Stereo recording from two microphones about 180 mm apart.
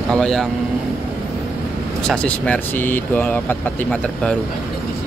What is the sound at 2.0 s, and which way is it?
Speech, 5° left (ahead or behind).